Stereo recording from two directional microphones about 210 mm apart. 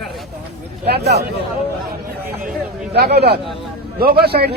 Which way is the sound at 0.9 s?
50° right (ahead or behind).